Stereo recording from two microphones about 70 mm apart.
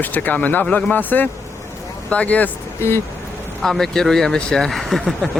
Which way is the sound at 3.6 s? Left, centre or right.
Centre.